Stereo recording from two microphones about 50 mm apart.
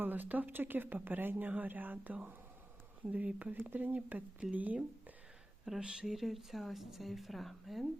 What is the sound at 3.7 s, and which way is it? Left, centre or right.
Speech, right.